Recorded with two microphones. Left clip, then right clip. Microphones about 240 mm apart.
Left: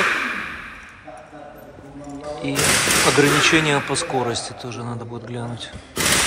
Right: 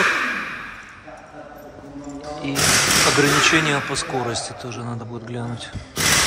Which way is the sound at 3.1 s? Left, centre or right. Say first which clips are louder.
Even; centre.